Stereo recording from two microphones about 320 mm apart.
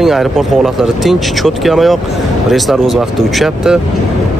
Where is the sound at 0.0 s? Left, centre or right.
Centre.